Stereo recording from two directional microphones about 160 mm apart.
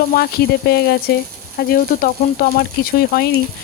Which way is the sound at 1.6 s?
65° left (ahead or behind).